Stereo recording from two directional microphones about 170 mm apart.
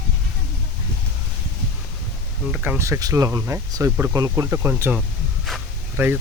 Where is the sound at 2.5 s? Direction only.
10° right (ahead or behind).